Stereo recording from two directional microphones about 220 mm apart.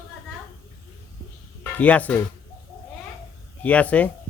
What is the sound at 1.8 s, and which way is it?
Speech, 5° left (ahead or behind).